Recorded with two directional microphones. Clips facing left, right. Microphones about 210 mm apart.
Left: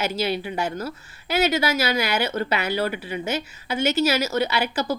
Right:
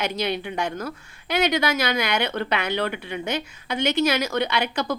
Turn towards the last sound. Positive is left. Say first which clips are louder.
# left 1 dB
turn(degrees=5)  # may be behind; listen again after turning